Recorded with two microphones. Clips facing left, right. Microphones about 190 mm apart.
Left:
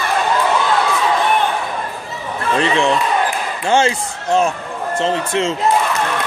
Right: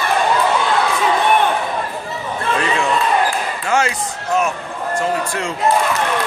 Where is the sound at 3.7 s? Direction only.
25° left (ahead or behind).